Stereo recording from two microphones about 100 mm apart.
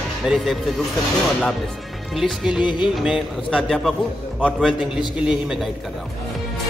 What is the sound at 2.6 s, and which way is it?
Music, 50° left (ahead or behind).